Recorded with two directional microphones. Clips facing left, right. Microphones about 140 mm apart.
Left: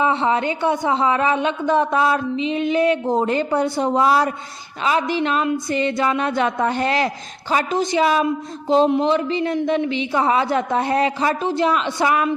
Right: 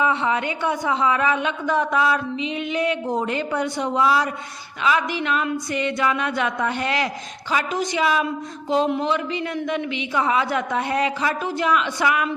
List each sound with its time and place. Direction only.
0.0 s a man's voice: 30° left (ahead or behind)